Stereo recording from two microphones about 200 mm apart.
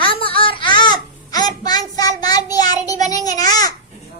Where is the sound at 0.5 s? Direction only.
25° left (ahead or behind).